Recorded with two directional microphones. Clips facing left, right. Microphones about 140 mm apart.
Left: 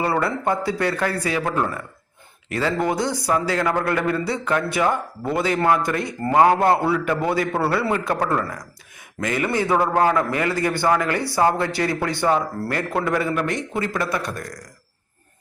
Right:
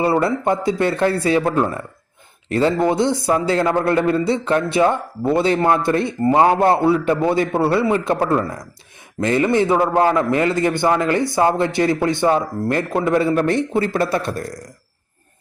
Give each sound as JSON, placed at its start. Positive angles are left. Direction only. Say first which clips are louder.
{"t": 0.0, "sound": "a man's voice", "louder": "right 4 dB", "side_deg": -25}